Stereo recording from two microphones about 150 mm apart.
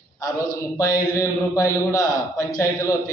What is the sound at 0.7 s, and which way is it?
A man's voice, 20° left (ahead or behind).